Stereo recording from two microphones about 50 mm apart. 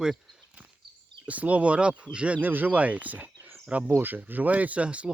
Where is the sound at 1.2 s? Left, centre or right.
Right.